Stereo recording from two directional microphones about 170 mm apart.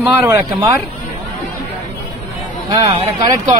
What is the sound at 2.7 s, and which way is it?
Speech, 20° right (ahead or behind).